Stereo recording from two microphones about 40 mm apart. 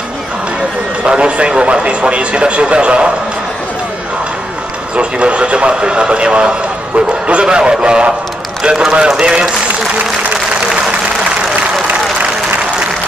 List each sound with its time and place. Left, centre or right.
1.0 s a man's voice: right
4.9 s a man's voice: right